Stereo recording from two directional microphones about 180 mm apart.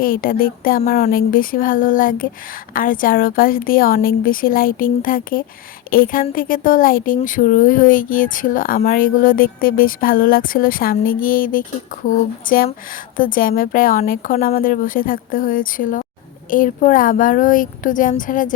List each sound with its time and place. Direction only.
0.0 s speech: 50° left (ahead or behind)